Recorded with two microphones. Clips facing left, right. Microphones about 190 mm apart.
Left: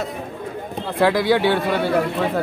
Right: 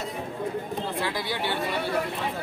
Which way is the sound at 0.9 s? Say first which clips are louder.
Left 18 dB; 90° left.